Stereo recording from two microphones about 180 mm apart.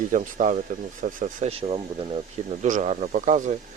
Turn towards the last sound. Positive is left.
turn(degrees=-45)  # may be behind; listen again after turning